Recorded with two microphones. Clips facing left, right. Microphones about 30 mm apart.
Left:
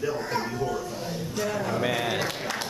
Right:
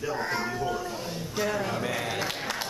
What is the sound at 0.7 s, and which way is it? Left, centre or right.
A man's voice, centre.